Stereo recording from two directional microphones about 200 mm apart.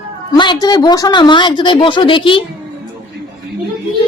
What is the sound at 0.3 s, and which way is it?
A woman's voice, 20° left (ahead or behind).